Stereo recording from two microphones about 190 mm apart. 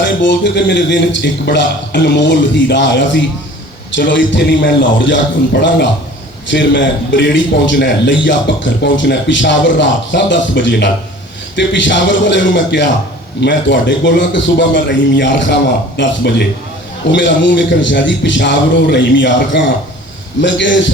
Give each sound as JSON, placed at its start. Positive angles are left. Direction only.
{"t": 0.2, "sound": "a man's voice", "side_deg": 70}